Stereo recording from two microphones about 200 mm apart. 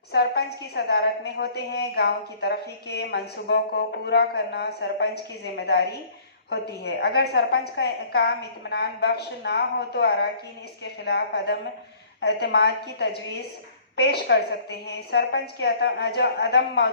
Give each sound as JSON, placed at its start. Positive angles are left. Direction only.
{"t": 0.1, "sound": "a woman's voice", "side_deg": 55}